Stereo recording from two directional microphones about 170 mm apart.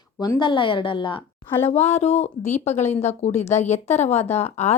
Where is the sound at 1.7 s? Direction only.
40° left (ahead or behind).